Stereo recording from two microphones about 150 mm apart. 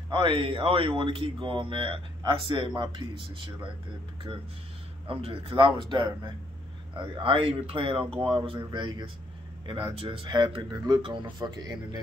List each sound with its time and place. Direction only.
0.1 s speech: 35° right (ahead or behind)
5.0 s speech: 35° right (ahead or behind)